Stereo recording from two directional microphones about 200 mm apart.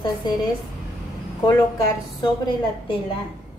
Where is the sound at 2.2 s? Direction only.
25° left (ahead or behind).